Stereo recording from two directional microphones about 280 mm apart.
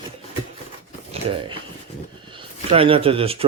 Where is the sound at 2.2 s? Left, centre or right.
Centre.